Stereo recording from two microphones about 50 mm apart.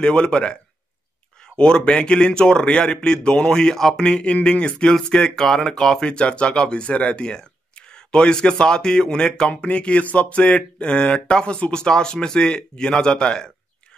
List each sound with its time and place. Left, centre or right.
0.0 s speech: centre
1.6 s speech: centre
4.9 s speech: centre
6.0 s speech: left